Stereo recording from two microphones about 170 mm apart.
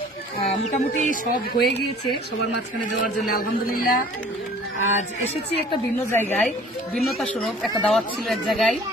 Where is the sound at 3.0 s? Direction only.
60° left (ahead or behind).